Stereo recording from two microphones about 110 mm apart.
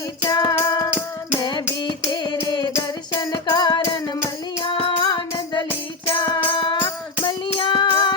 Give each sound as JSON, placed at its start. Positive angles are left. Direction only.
{"t": 0.2, "sound": "music", "side_deg": 35}
{"t": 1.4, "sound": "a sound", "side_deg": 45}
{"t": 1.8, "sound": "music", "side_deg": 45}
{"t": 4.6, "sound": "child singing", "side_deg": 55}
{"t": 6.1, "sound": "music", "side_deg": 45}